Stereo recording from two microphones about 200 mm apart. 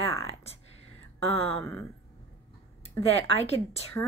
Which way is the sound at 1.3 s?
30° left (ahead or behind).